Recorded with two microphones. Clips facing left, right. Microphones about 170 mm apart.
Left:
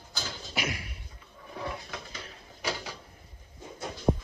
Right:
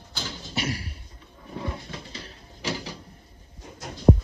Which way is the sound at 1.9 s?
30° right (ahead or behind).